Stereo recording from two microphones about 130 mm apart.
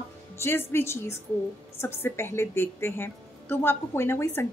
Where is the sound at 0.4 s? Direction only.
15° left (ahead or behind).